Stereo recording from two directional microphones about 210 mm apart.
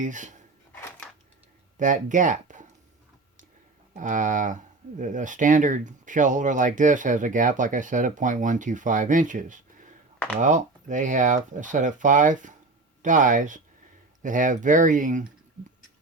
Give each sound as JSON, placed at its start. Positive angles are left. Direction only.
{"t": 0.0, "sound": "speech", "side_deg": -35}
{"t": 1.8, "sound": "speech", "side_deg": -40}
{"t": 3.9, "sound": "speech", "side_deg": -35}